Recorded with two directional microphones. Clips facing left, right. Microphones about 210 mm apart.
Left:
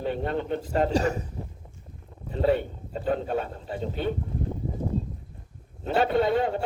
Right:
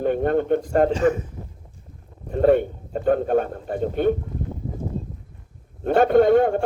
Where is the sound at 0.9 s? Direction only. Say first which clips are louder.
Right 5 dB; 40° left (ahead or behind).